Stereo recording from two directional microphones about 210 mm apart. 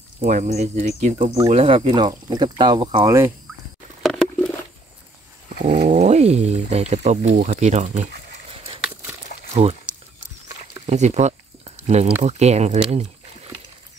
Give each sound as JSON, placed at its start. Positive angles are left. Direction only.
{"t": 0.2, "sound": "speech", "side_deg": -35}
{"t": 4.0, "sound": "patter", "side_deg": 5}
{"t": 5.7, "sound": "speech", "side_deg": -40}
{"t": 9.5, "sound": "speech", "side_deg": -30}
{"t": 10.9, "sound": "speech", "side_deg": -35}